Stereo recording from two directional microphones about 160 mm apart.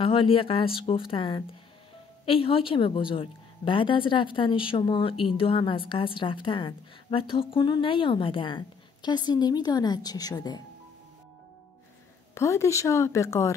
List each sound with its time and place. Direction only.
0.0 s a woman's voice: 35° left (ahead or behind)
12.4 s speech: 20° left (ahead or behind)